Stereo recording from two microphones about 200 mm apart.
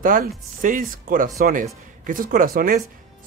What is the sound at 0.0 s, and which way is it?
Speech, 40° right (ahead or behind).